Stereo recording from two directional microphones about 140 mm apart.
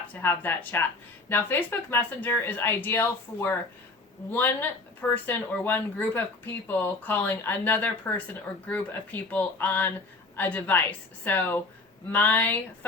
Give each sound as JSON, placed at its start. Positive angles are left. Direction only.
{"t": 0.1, "sound": "speech", "side_deg": 15}